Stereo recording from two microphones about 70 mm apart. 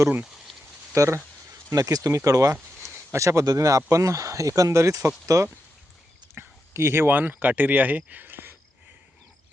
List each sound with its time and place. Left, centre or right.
0.9 s speech: right
6.3 s speech: right